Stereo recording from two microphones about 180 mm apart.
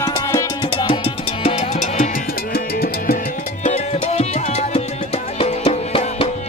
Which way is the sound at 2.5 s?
60° left (ahead or behind).